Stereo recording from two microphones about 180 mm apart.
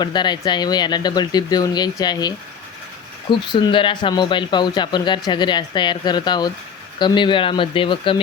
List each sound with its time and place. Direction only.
0.0 s speech: 25° left (ahead or behind)